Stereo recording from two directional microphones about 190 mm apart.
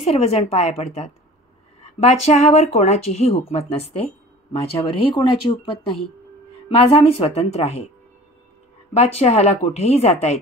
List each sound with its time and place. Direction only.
0.0 s speech: 30° left (ahead or behind)
6.7 s speech: 30° left (ahead or behind)
8.9 s speech: 35° left (ahead or behind)